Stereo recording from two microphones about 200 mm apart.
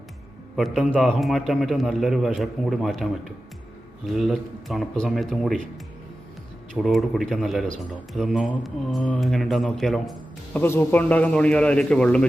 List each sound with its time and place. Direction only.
0.5 s speech: centre (ahead or behind)
6.7 s speech: centre (ahead or behind)